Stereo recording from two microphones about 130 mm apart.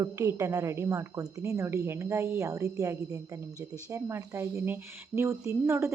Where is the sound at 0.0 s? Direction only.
25° right (ahead or behind).